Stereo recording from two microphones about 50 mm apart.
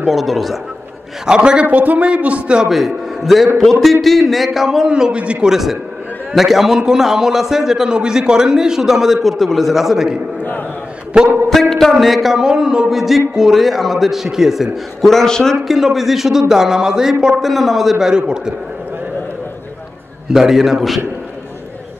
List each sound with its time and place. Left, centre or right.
0.0 s speech: centre
1.2 s a man's voice: centre
1.7 s a man's voice: right
2.7 s a man's voice: centre; by 5.5 s right
5.5 s a man's voice: centre
11.5 s a sound: centre
12.0 s speech: centre
15.0 s a man's voice: centre
15.7 s a man's voice: centre
20.2 s a man's voice: centre